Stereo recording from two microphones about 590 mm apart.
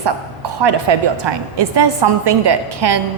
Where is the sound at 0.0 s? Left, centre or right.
Right.